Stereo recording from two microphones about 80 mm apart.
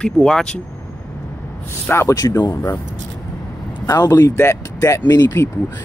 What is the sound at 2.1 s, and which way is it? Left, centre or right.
Speech, left.